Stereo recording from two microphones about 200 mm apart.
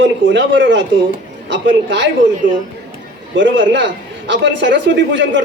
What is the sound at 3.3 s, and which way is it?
A man's voice, 65° right (ahead or behind).